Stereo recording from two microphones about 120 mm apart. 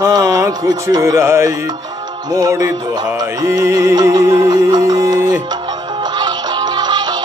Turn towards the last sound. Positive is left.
turn(degrees=-35)  # may be behind; listen again after turning